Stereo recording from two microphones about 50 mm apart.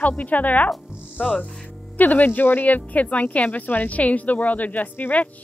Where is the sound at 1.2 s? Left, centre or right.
Centre.